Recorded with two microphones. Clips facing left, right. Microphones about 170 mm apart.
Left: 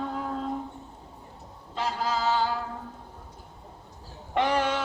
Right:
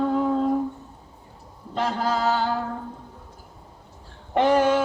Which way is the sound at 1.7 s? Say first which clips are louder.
Right 5 dB; 60° right (ahead or behind).